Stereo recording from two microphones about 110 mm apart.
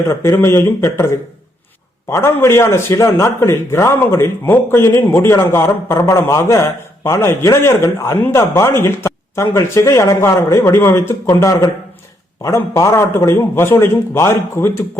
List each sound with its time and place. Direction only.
0.1 s speech: 25° left (ahead or behind)